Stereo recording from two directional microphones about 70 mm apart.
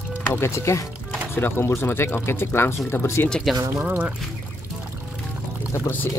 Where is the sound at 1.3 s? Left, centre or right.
Left.